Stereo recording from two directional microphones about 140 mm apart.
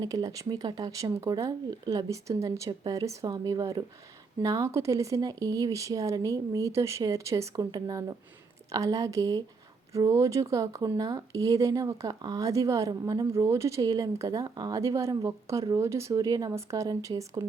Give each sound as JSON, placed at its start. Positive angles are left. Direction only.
{"t": 0.0, "sound": "speech", "side_deg": -25}